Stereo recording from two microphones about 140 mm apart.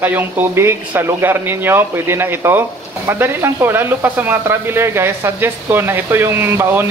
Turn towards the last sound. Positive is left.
turn(degrees=-15)  # may be behind; listen again after turning